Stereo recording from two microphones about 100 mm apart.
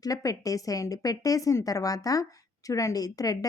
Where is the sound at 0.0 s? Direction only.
35° left (ahead or behind).